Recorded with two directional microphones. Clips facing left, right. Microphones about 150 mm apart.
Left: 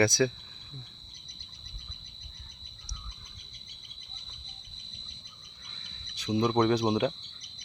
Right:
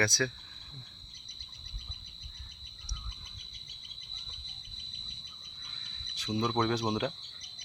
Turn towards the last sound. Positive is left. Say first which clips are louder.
# left 5 dB
turn(degrees=0)  # may be behind; listen again after turning